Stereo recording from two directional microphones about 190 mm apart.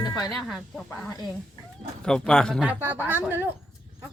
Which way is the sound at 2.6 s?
10° right (ahead or behind).